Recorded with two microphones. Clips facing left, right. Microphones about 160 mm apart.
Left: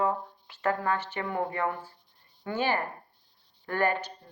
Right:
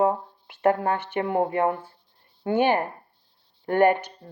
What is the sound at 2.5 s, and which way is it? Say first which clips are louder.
Speech: right 7 dB; 55° right (ahead or behind).